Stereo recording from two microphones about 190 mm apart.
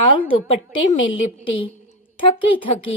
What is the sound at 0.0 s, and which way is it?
A woman's voice, 30° left (ahead or behind).